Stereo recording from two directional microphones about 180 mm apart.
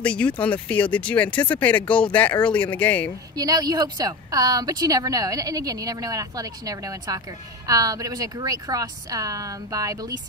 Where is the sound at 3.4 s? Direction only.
20° right (ahead or behind).